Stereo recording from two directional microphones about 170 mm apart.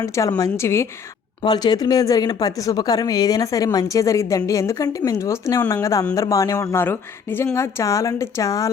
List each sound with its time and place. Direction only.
0.0 s a woman's voice: 20° left (ahead or behind)